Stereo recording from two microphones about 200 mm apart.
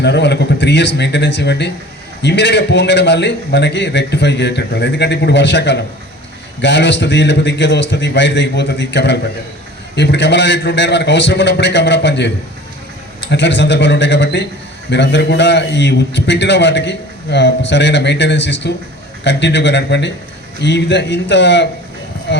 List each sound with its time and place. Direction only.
0.0 s a man's voice: 60° left (ahead or behind)
13.3 s a man's voice: 60° left (ahead or behind)
22.3 s a sound: 60° left (ahead or behind)